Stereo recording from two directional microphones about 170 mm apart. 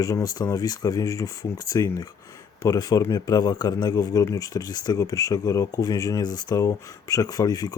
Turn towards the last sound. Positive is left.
turn(degrees=20)  # may be behind; listen again after turning